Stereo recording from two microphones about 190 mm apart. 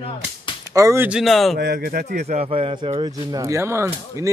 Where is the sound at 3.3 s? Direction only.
15° right (ahead or behind).